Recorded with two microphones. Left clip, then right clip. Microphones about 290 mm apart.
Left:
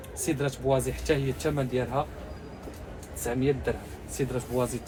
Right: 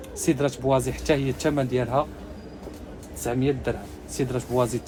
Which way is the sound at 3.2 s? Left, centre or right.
Right.